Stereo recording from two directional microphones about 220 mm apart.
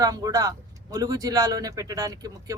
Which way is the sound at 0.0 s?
15° right (ahead or behind).